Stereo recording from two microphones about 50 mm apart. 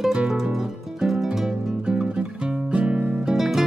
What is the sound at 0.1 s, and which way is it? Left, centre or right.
Music, centre.